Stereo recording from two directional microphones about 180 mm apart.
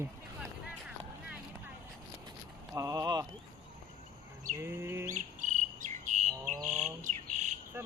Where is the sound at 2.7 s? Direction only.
20° right (ahead or behind).